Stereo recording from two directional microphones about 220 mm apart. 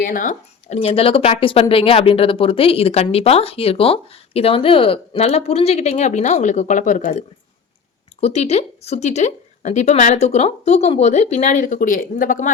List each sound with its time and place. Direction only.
0.0 s speech: 40° left (ahead or behind)